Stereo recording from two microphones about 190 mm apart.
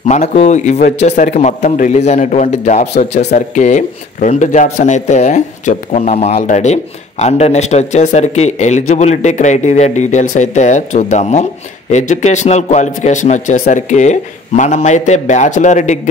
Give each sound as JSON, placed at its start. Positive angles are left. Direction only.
{"t": 0.1, "sound": "speech", "side_deg": 35}